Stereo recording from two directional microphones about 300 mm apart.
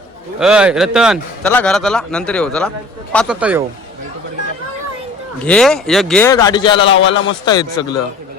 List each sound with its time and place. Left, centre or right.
0.3 s a man's voice: centre
5.4 s a man's voice: centre
6.8 s a man's voice: left
7.1 s speech: centre